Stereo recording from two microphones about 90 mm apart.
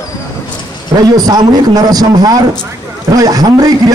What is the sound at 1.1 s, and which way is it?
A man's voice, 45° right (ahead or behind).